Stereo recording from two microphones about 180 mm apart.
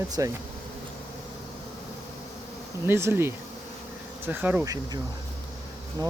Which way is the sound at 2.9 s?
15° right (ahead or behind).